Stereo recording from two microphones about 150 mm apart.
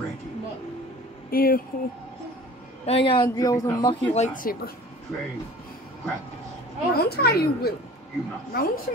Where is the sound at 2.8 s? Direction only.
40° left (ahead or behind).